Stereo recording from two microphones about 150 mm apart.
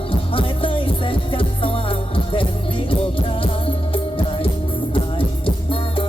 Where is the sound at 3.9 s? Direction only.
35° left (ahead or behind).